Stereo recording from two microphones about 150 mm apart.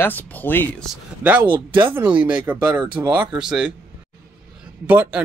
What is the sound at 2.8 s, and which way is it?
Speech, 30° right (ahead or behind).